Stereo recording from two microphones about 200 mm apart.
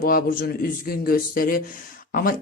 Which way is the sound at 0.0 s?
45° left (ahead or behind).